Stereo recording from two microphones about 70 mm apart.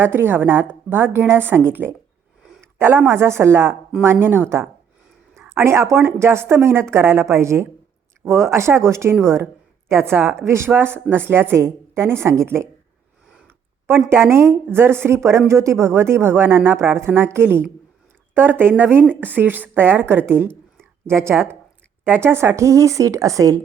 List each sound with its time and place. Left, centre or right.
0.0 s a woman's voice: right
2.6 s a sound: right
3.1 s a woman's voice: right
14.1 s a woman's voice: right